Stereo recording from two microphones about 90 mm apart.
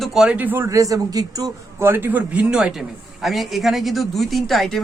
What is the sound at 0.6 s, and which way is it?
A man's voice, 40° right (ahead or behind).